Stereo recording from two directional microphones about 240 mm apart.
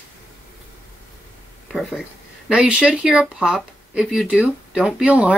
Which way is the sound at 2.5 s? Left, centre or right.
Centre.